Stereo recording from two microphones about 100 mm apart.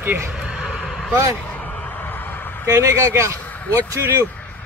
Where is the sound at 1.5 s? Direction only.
15° left (ahead or behind).